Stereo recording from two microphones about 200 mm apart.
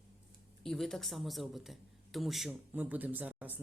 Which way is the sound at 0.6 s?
Centre (ahead or behind).